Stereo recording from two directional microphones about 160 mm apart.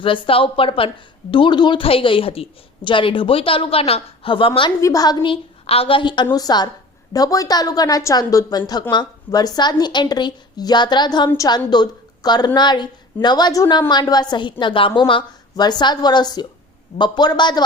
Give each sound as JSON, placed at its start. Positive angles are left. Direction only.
{"t": 0.0, "sound": "a woman's voice", "side_deg": 35}
{"t": 4.8, "sound": "a woman's voice", "side_deg": 20}